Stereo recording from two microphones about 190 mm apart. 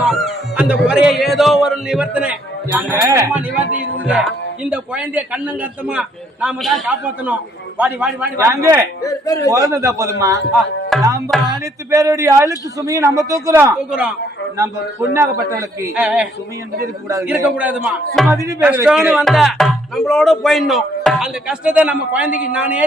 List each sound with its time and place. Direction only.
0.1 s a man's voice: 5° right (ahead or behind)
9.0 s a man's voice: 20° left (ahead or behind)
9.7 s a man's voice: 15° right (ahead or behind)
10.5 s music: centre (ahead or behind)
11.3 s speech: centre (ahead or behind)
11.9 s a man's voice: 15° right (ahead or behind)
13.7 s a man's voice: 5° right (ahead or behind)
15.1 s a man's voice: 15° right (ahead or behind)
18.4 s a man's voice: 10° right (ahead or behind)